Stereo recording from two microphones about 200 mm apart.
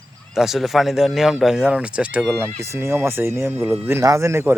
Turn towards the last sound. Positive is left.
turn(degrees=-10)  # may be behind; listen again after turning